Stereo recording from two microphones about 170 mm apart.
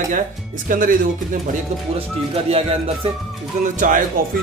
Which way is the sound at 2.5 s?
35° right (ahead or behind).